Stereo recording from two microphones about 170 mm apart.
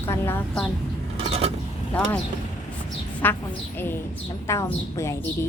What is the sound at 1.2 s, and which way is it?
Vehicle, 35° right (ahead or behind).